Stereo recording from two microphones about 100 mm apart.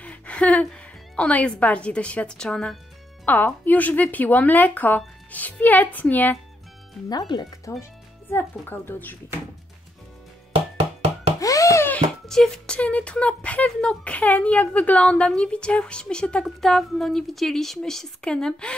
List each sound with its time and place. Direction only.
0.0 s a woman's voice: 15° left (ahead or behind)
3.3 s speech: 20° left (ahead or behind)
7.1 s speech: 45° left (ahead or behind)
7.7 s speech: 30° left (ahead or behind)
8.3 s a woman's voice: 20° left (ahead or behind)
11.3 s wail: 35° left (ahead or behind)
12.3 s speech: 5° left (ahead or behind)